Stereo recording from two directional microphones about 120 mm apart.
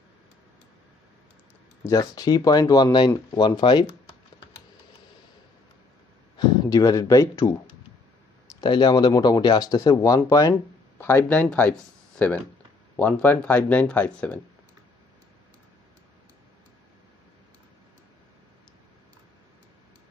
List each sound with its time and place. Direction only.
1.9 s speech: 30° left (ahead or behind)
6.3 s speech: 30° left (ahead or behind)
8.5 s speech: 35° left (ahead or behind)
11.0 s speech: 20° left (ahead or behind)